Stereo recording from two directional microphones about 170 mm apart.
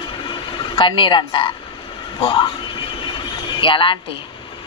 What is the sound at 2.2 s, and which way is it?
Speech, 30° left (ahead or behind).